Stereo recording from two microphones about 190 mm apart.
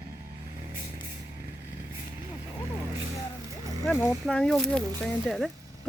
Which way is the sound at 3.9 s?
5° left (ahead or behind).